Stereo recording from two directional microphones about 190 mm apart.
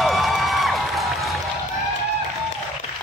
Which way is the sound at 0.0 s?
Centre (ahead or behind).